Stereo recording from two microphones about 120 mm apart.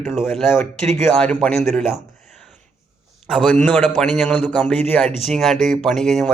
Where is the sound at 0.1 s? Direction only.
Centre (ahead or behind).